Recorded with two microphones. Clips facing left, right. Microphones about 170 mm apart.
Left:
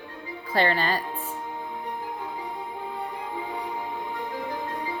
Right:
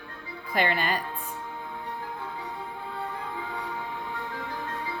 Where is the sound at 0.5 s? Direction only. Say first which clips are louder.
Left 2 dB; 35° left (ahead or behind).